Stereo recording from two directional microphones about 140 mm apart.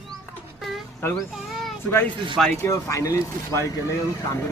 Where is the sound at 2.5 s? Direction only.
20° left (ahead or behind).